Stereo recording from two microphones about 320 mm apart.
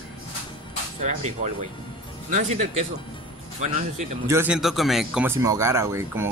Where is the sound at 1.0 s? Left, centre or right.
Right.